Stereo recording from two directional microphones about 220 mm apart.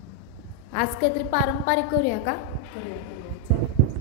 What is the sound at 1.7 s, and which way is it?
Speech, 40° left (ahead or behind).